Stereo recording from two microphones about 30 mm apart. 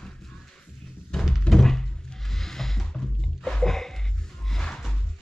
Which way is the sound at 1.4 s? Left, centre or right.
Centre.